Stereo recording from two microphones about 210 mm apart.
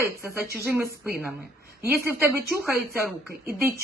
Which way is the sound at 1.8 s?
10° right (ahead or behind).